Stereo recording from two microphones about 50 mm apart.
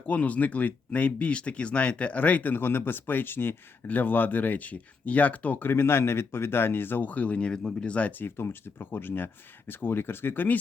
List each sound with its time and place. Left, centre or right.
0.1 s speech: left
3.8 s speech: left
5.7 s speech: left
8.1 s speech: left